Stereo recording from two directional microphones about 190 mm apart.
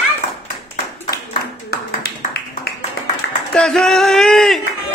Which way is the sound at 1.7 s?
55° left (ahead or behind).